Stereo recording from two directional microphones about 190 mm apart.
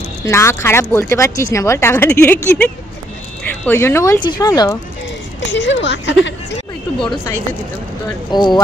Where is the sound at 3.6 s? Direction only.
10° left (ahead or behind).